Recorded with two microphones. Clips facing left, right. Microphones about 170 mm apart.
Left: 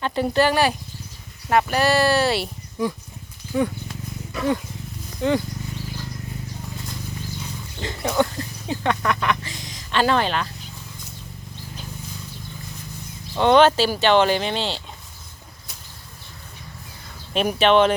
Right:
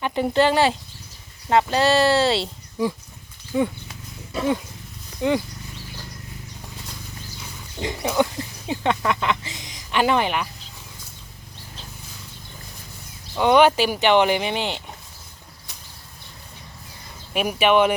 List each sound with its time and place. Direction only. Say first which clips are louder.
0.0 s speech: right 1 dB; 20° right (ahead or behind)
7.8 s speech: even; 15° right (ahead or behind)
13.4 s speech: left 1 dB; 10° right (ahead or behind)
17.3 s speech: left 1 dB; 10° right (ahead or behind)